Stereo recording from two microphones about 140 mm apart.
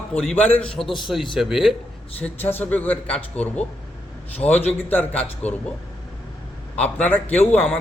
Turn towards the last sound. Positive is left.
turn(degrees=10)  # may be behind; listen again after turning